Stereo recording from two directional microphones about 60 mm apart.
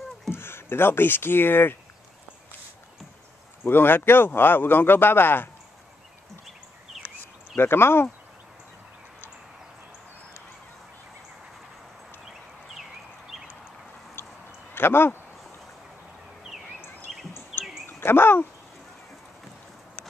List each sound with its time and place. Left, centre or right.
0.3 s speech: left
3.6 s speech: left
7.5 s speech: left
14.2 s a sound: left
14.7 s speech: left
17.8 s speech: left